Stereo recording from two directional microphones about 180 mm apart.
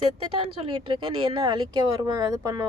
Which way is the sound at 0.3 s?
30° right (ahead or behind).